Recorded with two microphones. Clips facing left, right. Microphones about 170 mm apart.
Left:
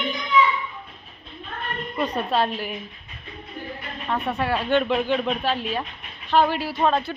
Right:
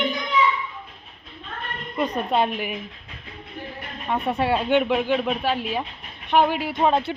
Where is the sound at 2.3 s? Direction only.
15° right (ahead or behind).